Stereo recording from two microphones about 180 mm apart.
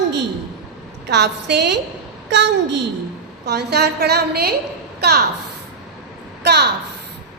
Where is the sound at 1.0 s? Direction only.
70° right (ahead or behind).